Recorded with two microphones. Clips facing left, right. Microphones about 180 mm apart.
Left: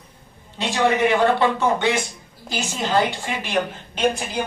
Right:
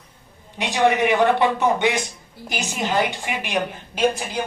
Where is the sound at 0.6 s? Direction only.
15° right (ahead or behind).